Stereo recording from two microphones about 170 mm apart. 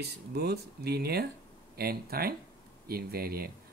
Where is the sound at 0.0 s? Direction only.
70° right (ahead or behind).